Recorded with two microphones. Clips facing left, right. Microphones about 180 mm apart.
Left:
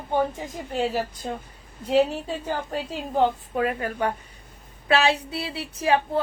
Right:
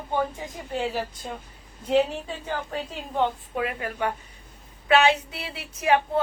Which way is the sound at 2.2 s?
40° left (ahead or behind).